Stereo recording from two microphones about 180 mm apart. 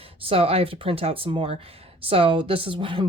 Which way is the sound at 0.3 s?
30° right (ahead or behind).